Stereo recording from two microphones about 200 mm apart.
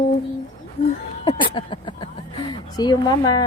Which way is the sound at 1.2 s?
25° left (ahead or behind).